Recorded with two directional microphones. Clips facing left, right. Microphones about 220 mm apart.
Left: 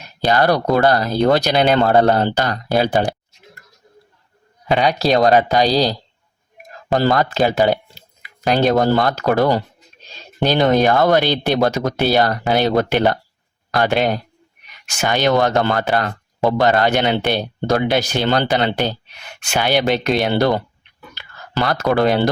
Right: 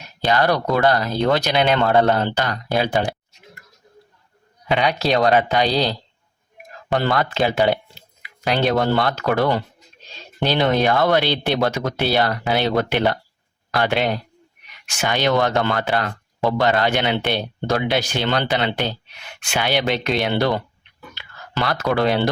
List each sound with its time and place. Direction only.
0.2 s speech: 40° left (ahead or behind)
4.7 s speech: 40° left (ahead or behind)